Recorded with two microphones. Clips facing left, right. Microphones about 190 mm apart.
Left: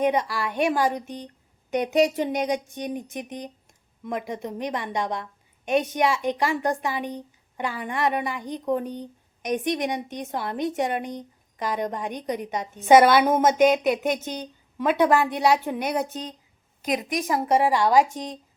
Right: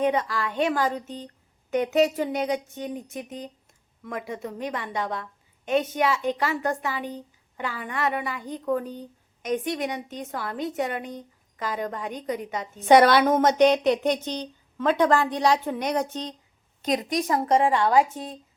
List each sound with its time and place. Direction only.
0.0 s a woman's voice: 15° left (ahead or behind)
12.9 s a woman's voice: 5° left (ahead or behind)
16.9 s a woman's voice: 20° left (ahead or behind)